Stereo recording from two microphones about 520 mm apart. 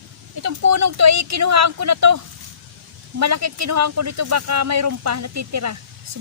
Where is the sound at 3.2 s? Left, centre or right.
Right.